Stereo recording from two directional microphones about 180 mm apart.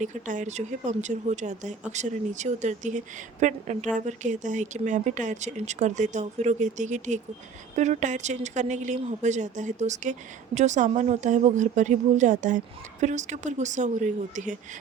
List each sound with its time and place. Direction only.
0.0 s speech: 45° right (ahead or behind)